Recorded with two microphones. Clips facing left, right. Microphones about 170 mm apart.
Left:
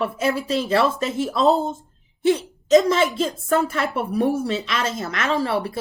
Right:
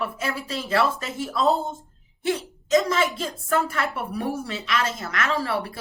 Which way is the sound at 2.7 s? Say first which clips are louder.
Left 5 dB; 25° left (ahead or behind).